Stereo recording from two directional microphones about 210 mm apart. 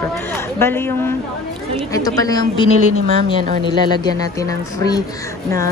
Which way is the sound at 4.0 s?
15° left (ahead or behind).